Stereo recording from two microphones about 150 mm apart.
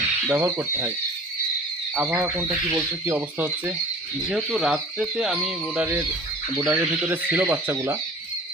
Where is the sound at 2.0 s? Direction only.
10° right (ahead or behind).